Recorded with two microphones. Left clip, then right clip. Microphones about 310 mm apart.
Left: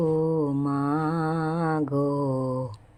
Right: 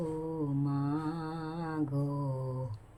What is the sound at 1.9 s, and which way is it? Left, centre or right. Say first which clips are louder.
Mantra: left 12 dB; left.